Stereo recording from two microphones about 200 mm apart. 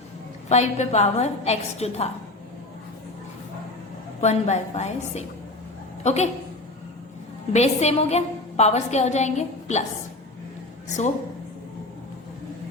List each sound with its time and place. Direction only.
0.4 s a woman's voice: 35° left (ahead or behind)
4.2 s a woman's voice: 35° left (ahead or behind)
7.5 s a woman's voice: 35° left (ahead or behind)